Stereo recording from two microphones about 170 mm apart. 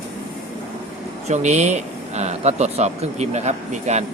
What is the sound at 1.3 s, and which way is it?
Speech, 45° right (ahead or behind).